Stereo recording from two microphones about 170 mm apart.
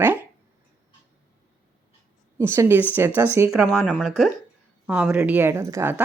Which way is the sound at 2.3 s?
15° right (ahead or behind).